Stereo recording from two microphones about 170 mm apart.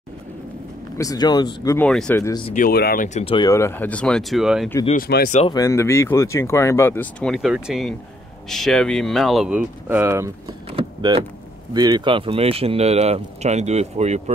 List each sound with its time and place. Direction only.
0.9 s speech: 20° left (ahead or behind)
1.8 s speech: 5° left (ahead or behind)
2.1 s speech: 15° left (ahead or behind)
2.5 s speech: 60° left (ahead or behind)
3.1 s speech: 40° left (ahead or behind)
3.3 s speech: 20° left (ahead or behind); by 4.6 s centre (ahead or behind)
4.9 s speech: 60° left (ahead or behind)
5.5 s speech: 20° left (ahead or behind); by 10.3 s 15° right (ahead or behind)
10.7 s power windows: 30° right (ahead or behind)
11.7 s speech: 25° right (ahead or behind); by 14.3 s 40° right (ahead or behind)